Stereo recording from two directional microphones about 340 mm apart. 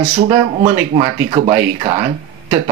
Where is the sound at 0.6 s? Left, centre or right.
Centre.